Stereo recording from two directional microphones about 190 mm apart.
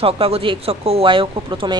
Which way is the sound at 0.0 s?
30° right (ahead or behind).